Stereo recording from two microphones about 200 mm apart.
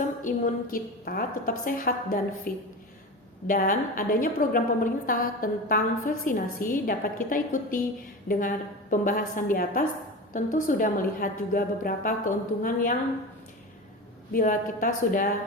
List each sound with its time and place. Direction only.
0.2 s a woman's voice: 40° left (ahead or behind)
14.3 s a woman's voice: 40° left (ahead or behind)